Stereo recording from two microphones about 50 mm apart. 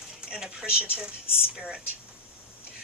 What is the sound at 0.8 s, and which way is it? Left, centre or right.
Speech, right.